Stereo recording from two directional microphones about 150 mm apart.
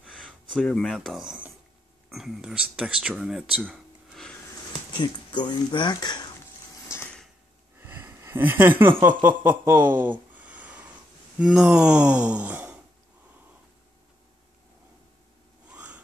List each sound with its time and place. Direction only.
0.0 s speech: 5° left (ahead or behind)
4.9 s speech: 30° left (ahead or behind)
7.8 s a sound: 15° right (ahead or behind)
9.4 s speech: 15° right (ahead or behind)
11.3 s gasp: 5° right (ahead or behind)
15.7 s a sound: 10° right (ahead or behind)